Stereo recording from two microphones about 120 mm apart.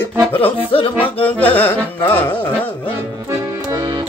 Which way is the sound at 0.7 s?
50° left (ahead or behind).